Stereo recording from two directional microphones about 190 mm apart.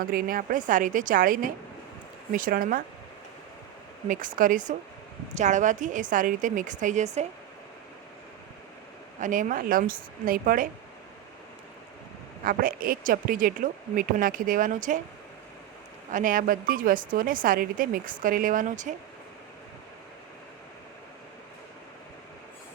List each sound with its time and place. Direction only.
0.0 s a woman's voice: 50° right (ahead or behind)
4.1 s a woman's voice: 45° right (ahead or behind)
9.2 s a woman's voice: 45° right (ahead or behind)
12.4 s a woman's voice: 50° right (ahead or behind)
16.1 s a woman's voice: 45° right (ahead or behind)